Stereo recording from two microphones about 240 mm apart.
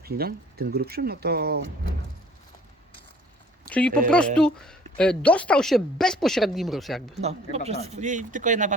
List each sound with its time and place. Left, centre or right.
0.0 s speech: right
3.7 s a woman's voice: centre
7.2 s speech: right